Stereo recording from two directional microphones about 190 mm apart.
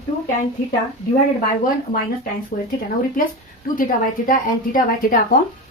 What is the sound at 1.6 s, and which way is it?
A woman's voice, 45° left (ahead or behind).